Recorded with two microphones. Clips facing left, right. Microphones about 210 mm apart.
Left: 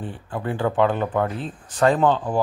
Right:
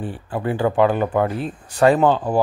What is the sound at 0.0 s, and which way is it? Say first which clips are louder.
Speech: right 4 dB; 10° right (ahead or behind).